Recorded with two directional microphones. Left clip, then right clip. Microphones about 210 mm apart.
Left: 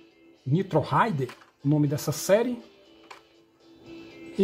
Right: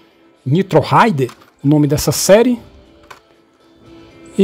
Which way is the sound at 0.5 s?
35° right (ahead or behind).